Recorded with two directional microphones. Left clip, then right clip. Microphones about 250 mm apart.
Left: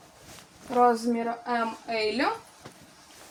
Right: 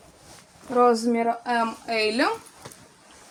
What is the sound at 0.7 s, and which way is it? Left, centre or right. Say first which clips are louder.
A woman's voice: right 3 dB; right.